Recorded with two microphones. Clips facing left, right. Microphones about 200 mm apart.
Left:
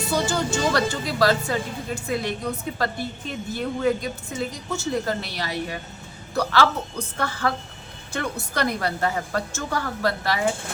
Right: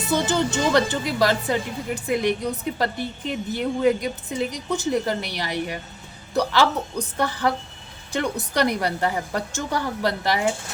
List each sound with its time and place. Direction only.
0.1 s a woman's voice: 20° right (ahead or behind)